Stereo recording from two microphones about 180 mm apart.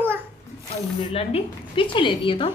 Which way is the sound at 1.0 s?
35° left (ahead or behind).